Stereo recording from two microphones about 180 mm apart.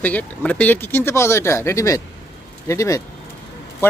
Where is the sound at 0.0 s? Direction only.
10° left (ahead or behind).